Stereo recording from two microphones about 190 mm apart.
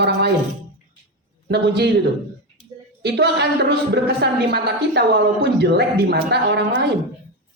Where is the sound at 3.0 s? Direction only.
65° right (ahead or behind).